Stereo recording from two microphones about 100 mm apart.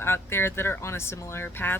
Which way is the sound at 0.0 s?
25° left (ahead or behind).